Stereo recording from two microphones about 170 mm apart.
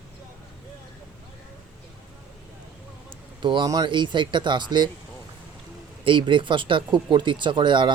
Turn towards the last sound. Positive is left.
turn(degrees=-25)  # may be behind; listen again after turning